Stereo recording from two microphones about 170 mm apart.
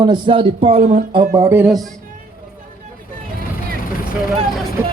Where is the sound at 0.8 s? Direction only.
55° right (ahead or behind).